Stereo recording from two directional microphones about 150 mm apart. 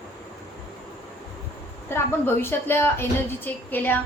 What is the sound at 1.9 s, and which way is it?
A woman's voice, 15° left (ahead or behind).